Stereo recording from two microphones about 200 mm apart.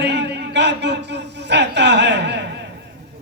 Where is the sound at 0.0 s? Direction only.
60° right (ahead or behind).